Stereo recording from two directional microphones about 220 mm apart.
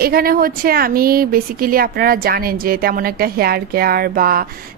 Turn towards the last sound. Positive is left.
turn(degrees=-40)  # may be behind; listen again after turning